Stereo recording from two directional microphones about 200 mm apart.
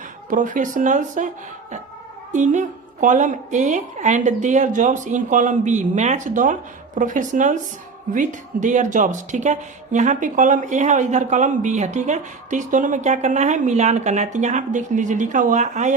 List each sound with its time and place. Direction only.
0.3 s speech: 40° right (ahead or behind)
2.3 s speech: 40° right (ahead or behind)